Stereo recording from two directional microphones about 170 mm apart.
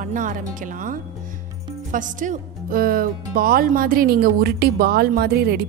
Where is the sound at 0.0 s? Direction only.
50° right (ahead or behind).